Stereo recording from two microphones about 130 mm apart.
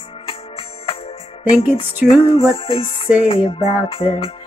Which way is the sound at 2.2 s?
45° left (ahead or behind).